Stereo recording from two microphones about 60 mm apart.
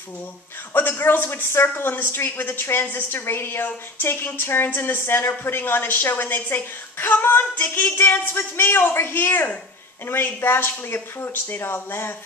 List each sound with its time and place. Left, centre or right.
0.7 s speech: left